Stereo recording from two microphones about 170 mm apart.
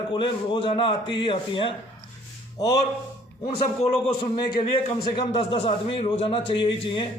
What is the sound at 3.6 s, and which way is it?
A man's voice, 35° left (ahead or behind).